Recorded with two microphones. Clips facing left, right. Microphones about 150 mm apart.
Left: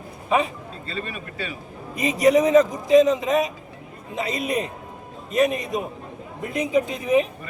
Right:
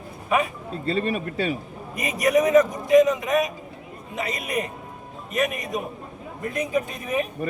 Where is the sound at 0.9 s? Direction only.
45° right (ahead or behind).